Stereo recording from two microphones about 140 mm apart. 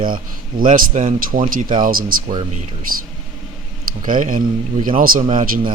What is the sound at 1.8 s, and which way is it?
Speech, 90° right.